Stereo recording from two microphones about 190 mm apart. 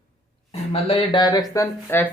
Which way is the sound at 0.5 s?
30° left (ahead or behind).